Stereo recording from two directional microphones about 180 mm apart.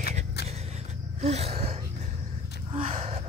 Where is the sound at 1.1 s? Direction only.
35° right (ahead or behind).